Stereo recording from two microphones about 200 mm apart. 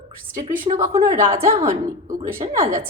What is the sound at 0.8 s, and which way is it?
A woman's voice, 15° right (ahead or behind).